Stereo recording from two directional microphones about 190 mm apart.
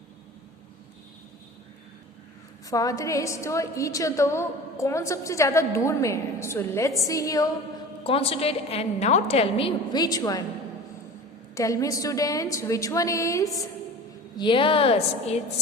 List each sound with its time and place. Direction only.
2.6 s a woman's voice: 20° left (ahead or behind)
8.0 s a woman's voice: 30° left (ahead or behind)
11.5 s a woman's voice: 15° left (ahead or behind); by 15.4 s 30° left (ahead or behind)